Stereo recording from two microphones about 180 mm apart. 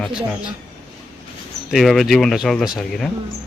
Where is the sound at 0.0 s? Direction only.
5° right (ahead or behind).